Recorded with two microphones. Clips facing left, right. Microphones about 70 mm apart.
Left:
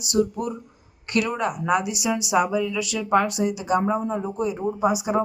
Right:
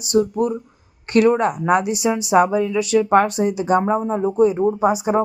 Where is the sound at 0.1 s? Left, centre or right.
Right.